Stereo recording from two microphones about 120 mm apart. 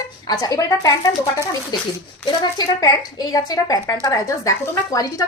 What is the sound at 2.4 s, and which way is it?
A woman's voice, 35° left (ahead or behind).